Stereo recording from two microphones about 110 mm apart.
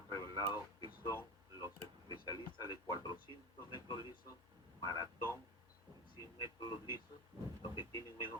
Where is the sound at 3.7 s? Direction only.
45° left (ahead or behind).